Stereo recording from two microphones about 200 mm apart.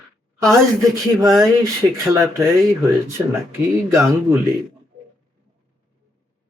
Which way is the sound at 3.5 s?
10° right (ahead or behind).